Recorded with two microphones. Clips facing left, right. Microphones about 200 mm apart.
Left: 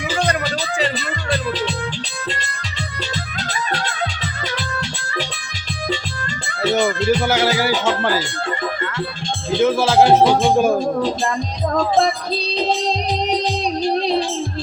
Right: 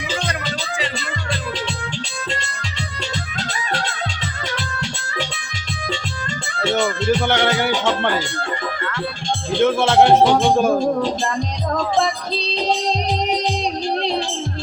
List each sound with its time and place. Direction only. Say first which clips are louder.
6.6 s music: left 2 dB; 15° left (ahead or behind)
7.1 s music: right 1 dB; 5° left (ahead or behind)
9.6 s music: even; 5° left (ahead or behind)